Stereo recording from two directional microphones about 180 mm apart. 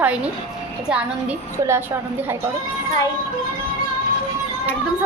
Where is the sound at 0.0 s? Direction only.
5° right (ahead or behind).